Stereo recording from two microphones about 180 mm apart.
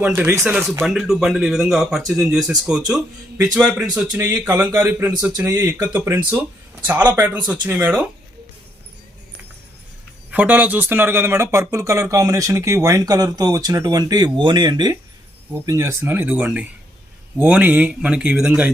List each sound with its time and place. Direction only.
0.0 s speech: 10° right (ahead or behind)
10.3 s speech: 10° right (ahead or behind)